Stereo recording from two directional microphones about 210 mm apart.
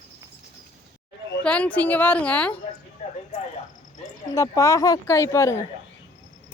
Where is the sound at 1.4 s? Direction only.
5° left (ahead or behind).